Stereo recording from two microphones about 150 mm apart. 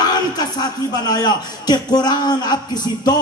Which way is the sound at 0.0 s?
30° left (ahead or behind).